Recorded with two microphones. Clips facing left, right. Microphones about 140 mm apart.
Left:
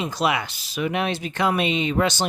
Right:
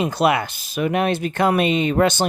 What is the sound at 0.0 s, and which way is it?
Speech, 55° right (ahead or behind).